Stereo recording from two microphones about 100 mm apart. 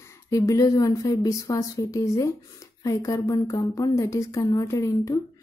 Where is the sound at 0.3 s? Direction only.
35° left (ahead or behind).